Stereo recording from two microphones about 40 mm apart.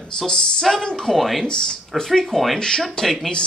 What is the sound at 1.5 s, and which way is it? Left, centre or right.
Speech, centre.